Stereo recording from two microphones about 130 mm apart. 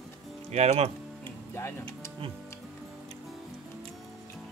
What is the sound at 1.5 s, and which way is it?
Speech, 20° left (ahead or behind).